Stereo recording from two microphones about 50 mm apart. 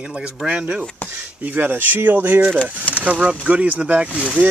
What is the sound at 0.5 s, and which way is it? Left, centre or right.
Speech, centre.